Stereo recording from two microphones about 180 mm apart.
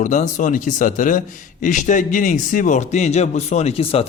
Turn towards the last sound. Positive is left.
turn(degrees=35)  # may be behind; listen again after turning